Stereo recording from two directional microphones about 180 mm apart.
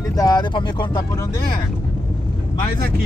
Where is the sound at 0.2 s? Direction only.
25° left (ahead or behind).